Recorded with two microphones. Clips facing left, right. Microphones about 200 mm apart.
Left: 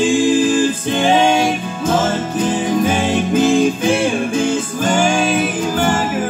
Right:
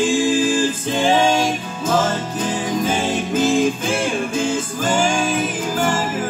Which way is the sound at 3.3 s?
15° left (ahead or behind).